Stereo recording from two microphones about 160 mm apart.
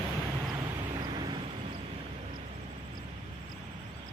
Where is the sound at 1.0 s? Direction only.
30° right (ahead or behind).